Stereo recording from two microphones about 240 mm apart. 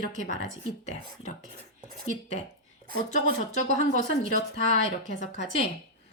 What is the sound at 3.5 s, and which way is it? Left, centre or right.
A woman's voice, left.